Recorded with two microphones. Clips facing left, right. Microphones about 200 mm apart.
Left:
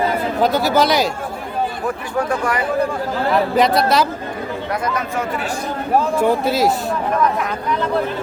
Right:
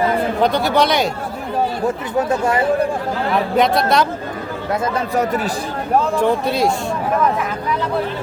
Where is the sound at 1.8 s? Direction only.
25° right (ahead or behind).